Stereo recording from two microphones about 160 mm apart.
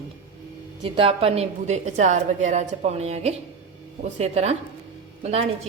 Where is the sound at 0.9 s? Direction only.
35° right (ahead or behind).